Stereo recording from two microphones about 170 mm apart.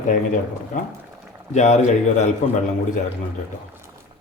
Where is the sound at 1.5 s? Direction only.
45° left (ahead or behind).